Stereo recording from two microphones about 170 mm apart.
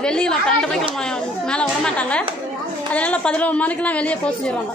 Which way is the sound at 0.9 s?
5° left (ahead or behind).